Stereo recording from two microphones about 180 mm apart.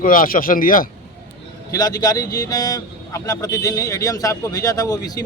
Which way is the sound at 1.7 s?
20° left (ahead or behind).